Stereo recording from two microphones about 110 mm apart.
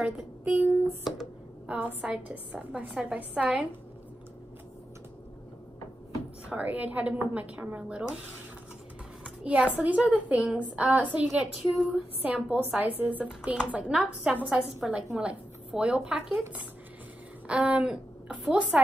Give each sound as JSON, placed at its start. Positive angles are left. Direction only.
{"t": 0.0, "sound": "speech", "side_deg": -20}
{"t": 6.5, "sound": "speech", "side_deg": -15}
{"t": 9.2, "sound": "a woman's voice", "side_deg": -10}
{"t": 17.5, "sound": "a woman's voice", "side_deg": -10}